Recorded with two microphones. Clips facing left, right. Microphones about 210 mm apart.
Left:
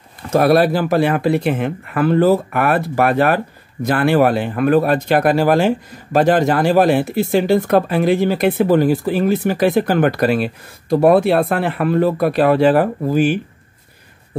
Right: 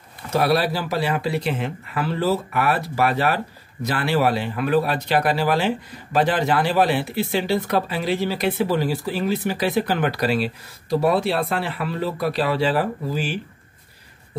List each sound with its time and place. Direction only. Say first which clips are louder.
0.3 s speech: left 7 dB; 50° left (ahead or behind)